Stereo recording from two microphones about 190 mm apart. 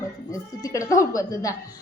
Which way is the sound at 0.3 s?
15° left (ahead or behind).